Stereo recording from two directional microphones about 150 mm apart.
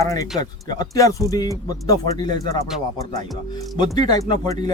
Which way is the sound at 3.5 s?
25° left (ahead or behind).